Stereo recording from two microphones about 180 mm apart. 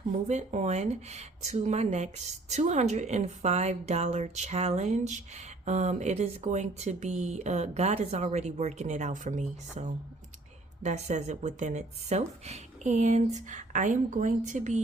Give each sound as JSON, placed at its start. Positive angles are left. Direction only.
{"t": 0.3, "sound": "speech", "side_deg": -40}